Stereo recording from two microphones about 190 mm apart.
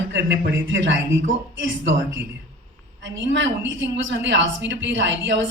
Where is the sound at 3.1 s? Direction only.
75° right (ahead or behind).